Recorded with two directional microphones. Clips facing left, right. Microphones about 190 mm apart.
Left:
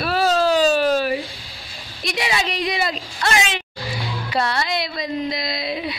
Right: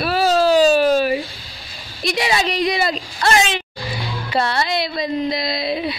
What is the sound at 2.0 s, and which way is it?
Speech, 35° right (ahead or behind).